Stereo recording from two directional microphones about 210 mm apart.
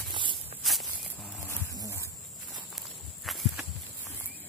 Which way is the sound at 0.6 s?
Centre (ahead or behind).